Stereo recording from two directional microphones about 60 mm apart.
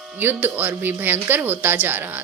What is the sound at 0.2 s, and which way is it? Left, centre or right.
A woman's voice, right.